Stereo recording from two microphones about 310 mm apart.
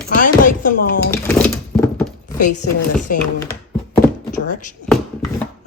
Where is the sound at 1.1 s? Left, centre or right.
Centre.